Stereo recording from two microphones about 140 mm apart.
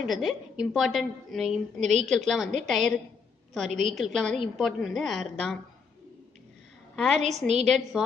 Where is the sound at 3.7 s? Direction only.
60° right (ahead or behind).